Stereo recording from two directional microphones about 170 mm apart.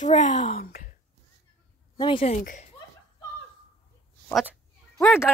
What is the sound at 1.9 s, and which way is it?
Speech, 30° left (ahead or behind).